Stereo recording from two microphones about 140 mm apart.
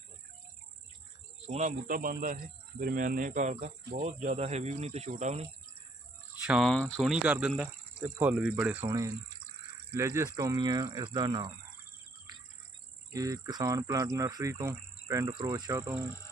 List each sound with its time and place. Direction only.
1.5 s speech: 50° right (ahead or behind)
1.9 s speech: 80° right; by 5.5 s 55° right (ahead or behind)
6.4 s cricket: 10° right (ahead or behind)
6.7 s speech: 5° left (ahead or behind)
8.9 s insect: 25° right (ahead or behind)
12.3 s cricket: 30° right (ahead or behind)
13.1 s insect: 25° right (ahead or behind)
15.3 s insect: 30° right (ahead or behind)